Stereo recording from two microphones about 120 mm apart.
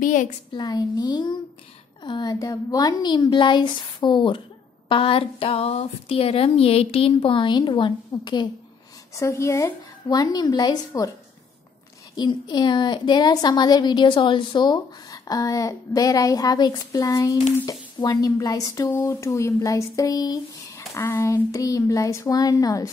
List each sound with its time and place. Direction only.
0.0 s a woman's voice: 90° left
0.5 s a woman's voice: 35° left (ahead or behind)
9.1 s speech: 25° left (ahead or behind)
12.2 s a woman's voice: 35° left (ahead or behind)